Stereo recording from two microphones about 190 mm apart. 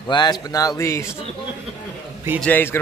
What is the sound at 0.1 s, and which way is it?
Speech, 20° left (ahead or behind).